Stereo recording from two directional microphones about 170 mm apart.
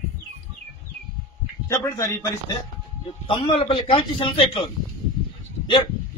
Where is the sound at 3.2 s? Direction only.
30° left (ahead or behind).